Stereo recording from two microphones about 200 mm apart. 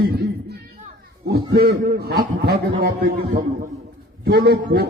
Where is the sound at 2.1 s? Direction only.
50° right (ahead or behind).